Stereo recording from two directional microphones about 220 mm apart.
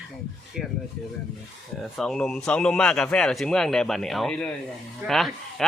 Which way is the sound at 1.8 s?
Centre (ahead or behind).